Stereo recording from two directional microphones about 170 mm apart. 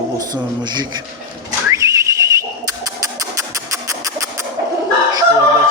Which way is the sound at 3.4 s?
20° right (ahead or behind).